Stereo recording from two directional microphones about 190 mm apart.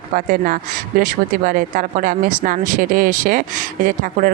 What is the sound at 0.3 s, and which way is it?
Speech, 45° right (ahead or behind).